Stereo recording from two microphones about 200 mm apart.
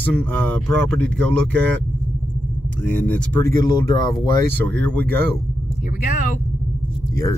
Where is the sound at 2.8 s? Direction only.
5° left (ahead or behind).